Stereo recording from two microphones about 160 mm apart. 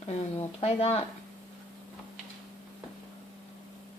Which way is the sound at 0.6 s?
40° left (ahead or behind).